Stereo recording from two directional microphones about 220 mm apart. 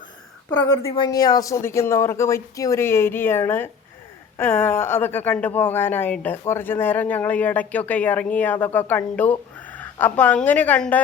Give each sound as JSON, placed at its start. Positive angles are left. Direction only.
{"t": 0.8, "sound": "speech", "side_deg": 20}